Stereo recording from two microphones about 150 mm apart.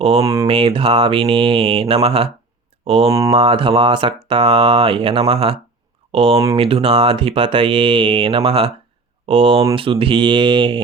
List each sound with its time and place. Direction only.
0.0 s speech: 40° right (ahead or behind)